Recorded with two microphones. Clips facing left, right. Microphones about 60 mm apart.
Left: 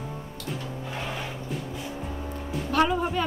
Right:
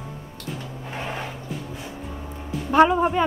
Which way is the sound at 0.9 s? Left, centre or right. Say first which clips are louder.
Right 4 dB; right.